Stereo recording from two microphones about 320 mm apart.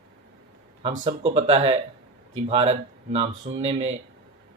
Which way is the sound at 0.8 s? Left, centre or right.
Centre.